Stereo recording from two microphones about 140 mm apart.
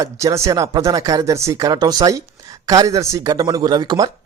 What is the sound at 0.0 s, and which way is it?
Speech, 25° right (ahead or behind).